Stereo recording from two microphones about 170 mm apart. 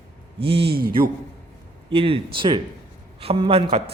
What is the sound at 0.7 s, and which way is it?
Speech, 60° right (ahead or behind).